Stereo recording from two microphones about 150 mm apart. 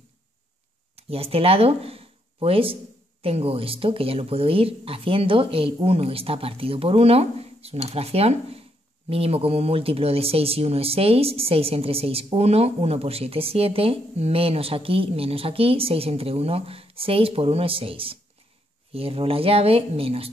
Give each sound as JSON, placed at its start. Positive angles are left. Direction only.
{"t": 0.9, "sound": "speech", "side_deg": -40}